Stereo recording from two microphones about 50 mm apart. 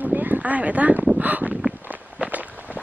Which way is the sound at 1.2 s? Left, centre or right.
Right.